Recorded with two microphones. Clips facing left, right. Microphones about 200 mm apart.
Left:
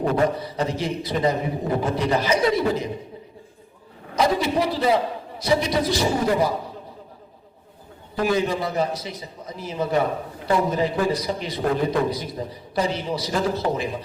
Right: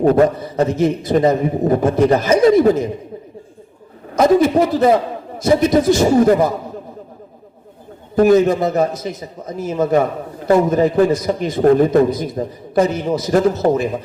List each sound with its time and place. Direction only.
0.0 s a man's voice: 45° right (ahead or behind)
4.1 s a man's voice: 50° right (ahead or behind)
8.1 s a man's voice: 45° right (ahead or behind)